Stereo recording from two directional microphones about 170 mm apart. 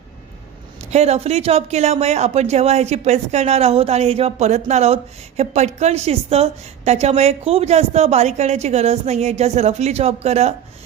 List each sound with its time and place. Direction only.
0.8 s a woman's voice: 40° right (ahead or behind)